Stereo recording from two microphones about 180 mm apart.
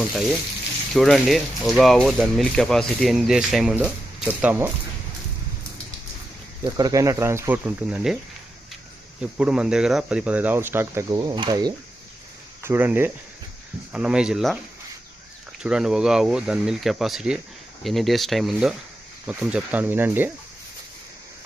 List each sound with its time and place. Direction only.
0.0 s speech: centre (ahead or behind)
6.7 s speech: 20° right (ahead or behind)
9.2 s speech: 5° right (ahead or behind); by 11.7 s 20° right (ahead or behind)
12.6 s speech: 10° right (ahead or behind)
15.6 s speech: 5° right (ahead or behind)